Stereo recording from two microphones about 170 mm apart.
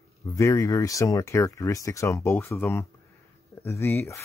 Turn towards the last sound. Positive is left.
turn(degrees=15)  # may be behind; listen again after turning